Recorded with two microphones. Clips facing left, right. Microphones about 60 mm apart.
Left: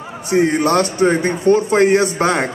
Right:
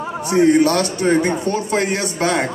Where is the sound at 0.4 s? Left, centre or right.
Left.